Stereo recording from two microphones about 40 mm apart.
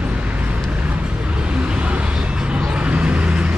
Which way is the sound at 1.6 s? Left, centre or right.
Right.